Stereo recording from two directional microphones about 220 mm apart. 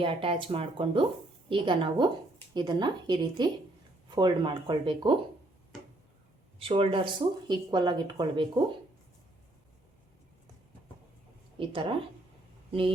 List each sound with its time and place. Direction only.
0.0 s speech: 25° right (ahead or behind)
6.6 s speech: 25° right (ahead or behind)
11.5 s speech: 25° right (ahead or behind)